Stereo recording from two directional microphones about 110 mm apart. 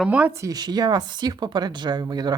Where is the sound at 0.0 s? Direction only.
10° right (ahead or behind).